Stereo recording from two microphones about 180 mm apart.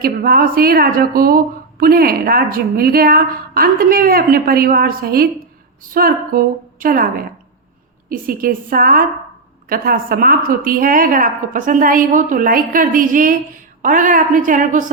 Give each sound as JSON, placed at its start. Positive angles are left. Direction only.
{"t": 0.0, "sound": "a woman's voice", "side_deg": -55}